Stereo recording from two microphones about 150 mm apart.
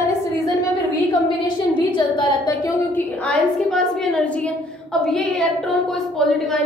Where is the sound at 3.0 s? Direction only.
10° left (ahead or behind).